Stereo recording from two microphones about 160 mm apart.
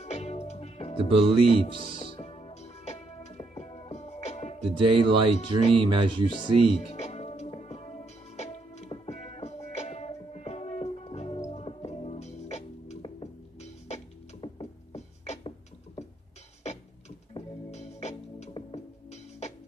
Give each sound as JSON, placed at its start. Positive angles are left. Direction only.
{"t": 0.0, "sound": "music", "side_deg": 40}
{"t": 1.0, "sound": "speech", "side_deg": -35}
{"t": 1.4, "sound": "music", "side_deg": 40}
{"t": 4.6, "sound": "speech", "side_deg": -30}
{"t": 6.3, "sound": "music", "side_deg": 45}
{"t": 17.3, "sound": "music", "side_deg": 45}